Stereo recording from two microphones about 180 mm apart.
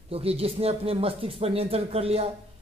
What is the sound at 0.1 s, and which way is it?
Speech, 35° right (ahead or behind).